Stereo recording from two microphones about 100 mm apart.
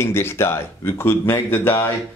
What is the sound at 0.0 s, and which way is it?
Speech, 25° left (ahead or behind).